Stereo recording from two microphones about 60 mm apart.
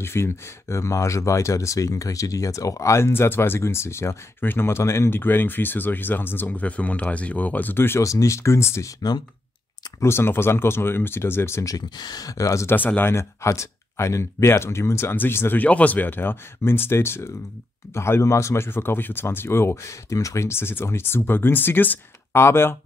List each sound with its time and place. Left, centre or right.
0.0 s speech: left
3.1 s speech: left
4.4 s speech: left
5.2 s speech: left
8.0 s speech: left
10.0 s speech: left
11.6 s speech: left
12.6 s speech: left
13.1 s speech: left
15.6 s speech: left
22.3 s speech: left